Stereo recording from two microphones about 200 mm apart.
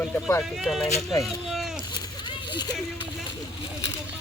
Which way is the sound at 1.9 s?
20° left (ahead or behind).